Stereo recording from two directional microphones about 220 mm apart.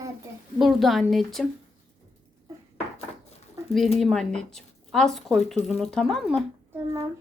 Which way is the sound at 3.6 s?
15° right (ahead or behind).